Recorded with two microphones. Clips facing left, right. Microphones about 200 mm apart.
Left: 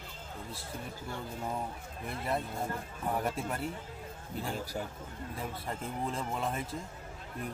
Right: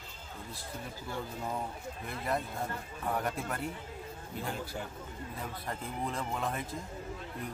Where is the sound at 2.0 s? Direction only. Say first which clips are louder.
Left 1 dB; 5° left (ahead or behind).